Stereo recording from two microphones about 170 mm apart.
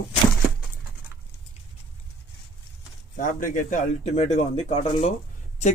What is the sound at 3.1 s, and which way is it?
Speech, 50° left (ahead or behind).